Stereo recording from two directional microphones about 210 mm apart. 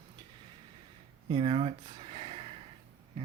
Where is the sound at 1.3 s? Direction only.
25° right (ahead or behind).